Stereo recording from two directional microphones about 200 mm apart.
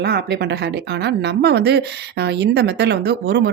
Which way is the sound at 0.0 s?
55° right (ahead or behind).